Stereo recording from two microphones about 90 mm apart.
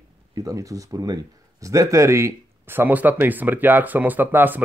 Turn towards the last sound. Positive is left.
turn(degrees=-20)  # may be behind; listen again after turning